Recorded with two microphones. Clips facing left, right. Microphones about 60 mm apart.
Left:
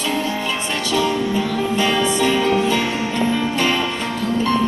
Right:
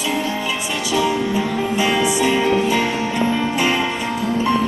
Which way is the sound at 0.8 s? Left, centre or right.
Centre.